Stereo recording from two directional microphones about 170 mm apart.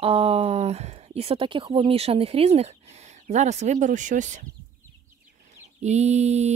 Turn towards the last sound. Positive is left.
turn(degrees=-40)  # may be behind; listen again after turning